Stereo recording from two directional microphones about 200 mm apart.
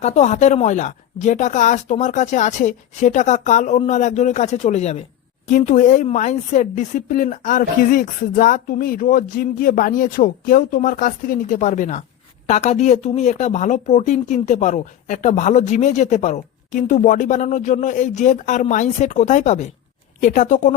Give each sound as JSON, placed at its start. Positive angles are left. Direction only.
{"t": 0.0, "sound": "speech", "side_deg": 35}